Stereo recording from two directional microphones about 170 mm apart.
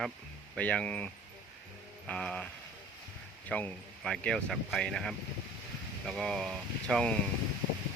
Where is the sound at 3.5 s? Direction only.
5° left (ahead or behind).